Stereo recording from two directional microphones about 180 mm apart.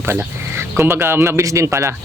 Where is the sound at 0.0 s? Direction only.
15° right (ahead or behind).